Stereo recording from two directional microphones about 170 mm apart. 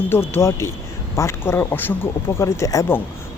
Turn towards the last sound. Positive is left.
turn(degrees=15)  # may be behind; listen again after turning